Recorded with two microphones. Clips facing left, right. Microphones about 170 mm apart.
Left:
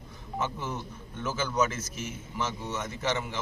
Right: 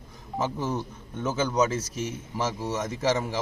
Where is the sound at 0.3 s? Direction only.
35° right (ahead or behind).